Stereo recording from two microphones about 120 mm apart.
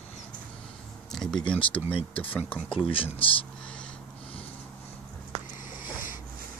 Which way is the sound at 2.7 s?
50° left (ahead or behind).